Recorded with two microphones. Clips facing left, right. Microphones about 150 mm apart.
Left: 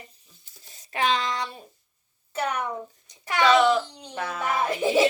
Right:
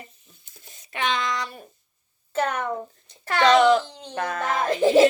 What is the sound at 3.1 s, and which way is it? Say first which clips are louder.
Babbling: right 1 dB; 15° left (ahead or behind).